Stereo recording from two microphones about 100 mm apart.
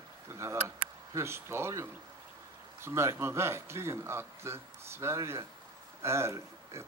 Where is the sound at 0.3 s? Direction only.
30° right (ahead or behind).